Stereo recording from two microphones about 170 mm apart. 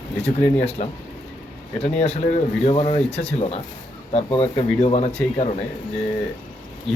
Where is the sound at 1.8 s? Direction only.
40° left (ahead or behind).